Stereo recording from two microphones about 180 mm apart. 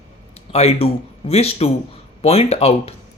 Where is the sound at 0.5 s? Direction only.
35° left (ahead or behind).